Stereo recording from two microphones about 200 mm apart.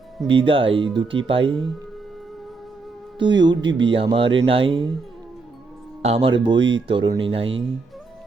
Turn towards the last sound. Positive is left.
turn(degrees=-25)  # may be behind; listen again after turning